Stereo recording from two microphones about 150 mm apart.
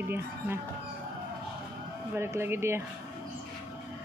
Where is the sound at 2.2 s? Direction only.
15° right (ahead or behind).